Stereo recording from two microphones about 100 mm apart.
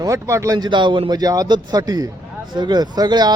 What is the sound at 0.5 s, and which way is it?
A man's voice, 50° right (ahead or behind).